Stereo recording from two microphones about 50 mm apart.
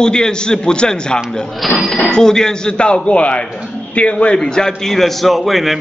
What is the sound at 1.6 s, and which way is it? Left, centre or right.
Speech, centre.